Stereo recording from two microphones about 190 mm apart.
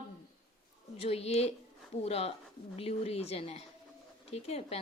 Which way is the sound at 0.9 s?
30° left (ahead or behind).